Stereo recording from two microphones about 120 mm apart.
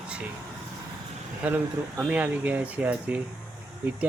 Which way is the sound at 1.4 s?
15° right (ahead or behind).